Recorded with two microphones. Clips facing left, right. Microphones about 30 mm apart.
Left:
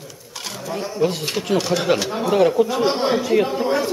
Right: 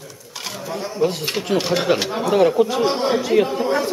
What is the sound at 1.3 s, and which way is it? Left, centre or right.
Speech, centre.